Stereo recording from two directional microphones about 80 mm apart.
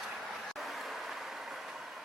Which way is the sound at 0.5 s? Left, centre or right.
Centre.